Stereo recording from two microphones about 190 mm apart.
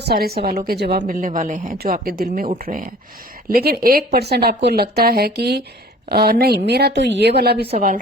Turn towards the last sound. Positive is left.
turn(degrees=-60)  # may be behind; listen again after turning